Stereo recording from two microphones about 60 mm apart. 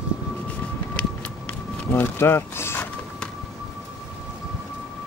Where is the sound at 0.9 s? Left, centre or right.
Centre.